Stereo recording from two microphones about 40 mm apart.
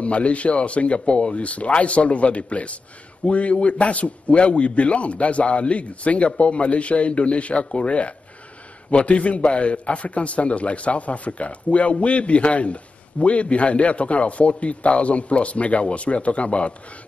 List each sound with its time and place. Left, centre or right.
0.0 s a man's voice: left